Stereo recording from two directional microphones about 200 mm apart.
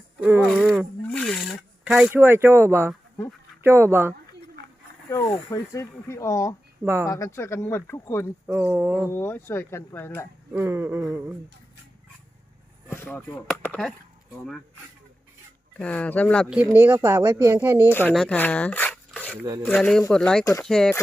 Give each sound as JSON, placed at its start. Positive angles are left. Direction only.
{"t": 0.2, "sound": "speech", "side_deg": -10}
{"t": 0.4, "sound": "speech", "side_deg": 5}
{"t": 1.0, "sound": "wild animals", "side_deg": 5}
{"t": 1.8, "sound": "speech", "side_deg": -5}
{"t": 5.0, "sound": "speech", "side_deg": 15}
{"t": 6.8, "sound": "speech", "side_deg": -10}
{"t": 7.1, "sound": "speech", "side_deg": 15}
{"t": 8.4, "sound": "speech", "side_deg": -10}
{"t": 9.1, "sound": "speech", "side_deg": 10}
{"t": 10.5, "sound": "speech", "side_deg": -10}
{"t": 12.9, "sound": "speech", "side_deg": 10}
{"t": 15.8, "sound": "speech", "side_deg": 5}
{"t": 16.6, "sound": "speech", "side_deg": -10}
{"t": 17.8, "sound": "speech", "side_deg": 10}